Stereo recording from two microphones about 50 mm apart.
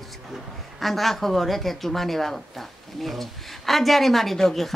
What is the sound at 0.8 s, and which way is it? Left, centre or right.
Speech, centre.